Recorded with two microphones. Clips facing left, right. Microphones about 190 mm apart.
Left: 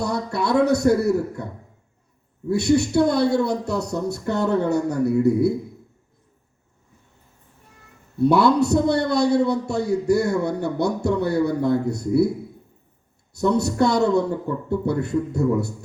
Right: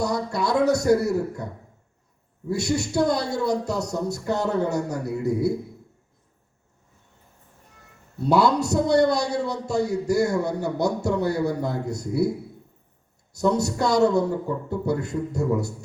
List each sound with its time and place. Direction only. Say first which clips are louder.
0.0 s a man's voice: left 1 dB; 60° left (ahead or behind)
2.5 s a man's voice: left 6 dB; 60° left (ahead or behind)
8.2 s a man's voice: left 3 dB; 60° left (ahead or behind)
13.3 s a man's voice: left 2 dB; 60° left (ahead or behind)